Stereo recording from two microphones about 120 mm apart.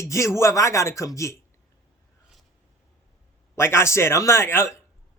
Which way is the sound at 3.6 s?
20° left (ahead or behind).